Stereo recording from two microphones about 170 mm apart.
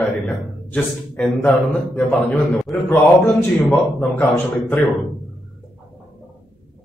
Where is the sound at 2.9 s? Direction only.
10° left (ahead or behind).